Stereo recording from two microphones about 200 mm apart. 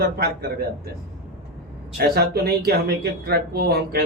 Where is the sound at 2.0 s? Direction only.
50° right (ahead or behind).